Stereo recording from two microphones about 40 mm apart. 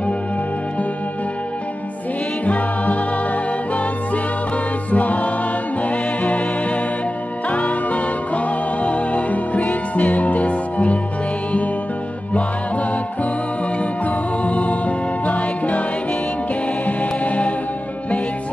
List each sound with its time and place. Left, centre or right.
2.4 s music: left
4.9 s music: left
14.0 s music: left
16.8 s music: left